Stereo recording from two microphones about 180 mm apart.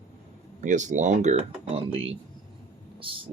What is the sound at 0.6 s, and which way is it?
Speech, 45° right (ahead or behind).